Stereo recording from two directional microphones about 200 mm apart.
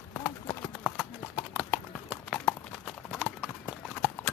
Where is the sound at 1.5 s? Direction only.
5° right (ahead or behind).